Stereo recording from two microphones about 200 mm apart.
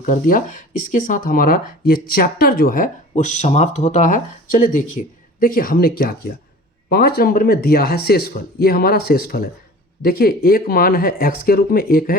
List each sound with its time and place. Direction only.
0.0 s speech: 45° left (ahead or behind)